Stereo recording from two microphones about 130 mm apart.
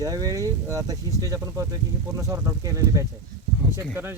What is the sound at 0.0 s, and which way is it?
Speech, 30° right (ahead or behind).